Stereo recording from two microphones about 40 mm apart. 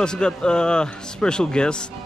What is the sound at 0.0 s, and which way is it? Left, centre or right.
Speech, left.